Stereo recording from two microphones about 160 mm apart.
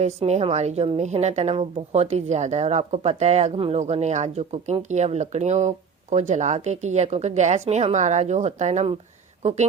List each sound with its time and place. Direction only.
0.0 s a woman's voice: 40° right (ahead or behind)